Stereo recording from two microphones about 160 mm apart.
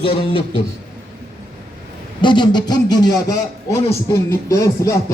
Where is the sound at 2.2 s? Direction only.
30° left (ahead or behind).